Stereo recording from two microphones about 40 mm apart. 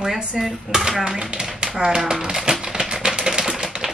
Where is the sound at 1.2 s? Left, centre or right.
Right.